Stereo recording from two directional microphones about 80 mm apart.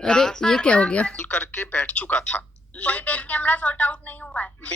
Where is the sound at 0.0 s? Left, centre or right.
Centre.